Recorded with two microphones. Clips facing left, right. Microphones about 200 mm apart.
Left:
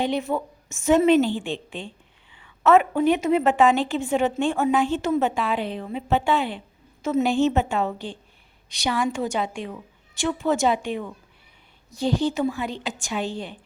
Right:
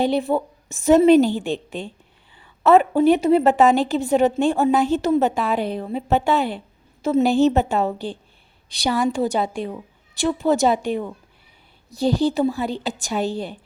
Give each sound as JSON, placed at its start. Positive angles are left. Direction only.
{"t": 0.0, "sound": "a woman's voice", "side_deg": -35}